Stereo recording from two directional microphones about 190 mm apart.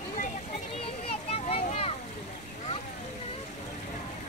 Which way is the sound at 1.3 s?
30° left (ahead or behind).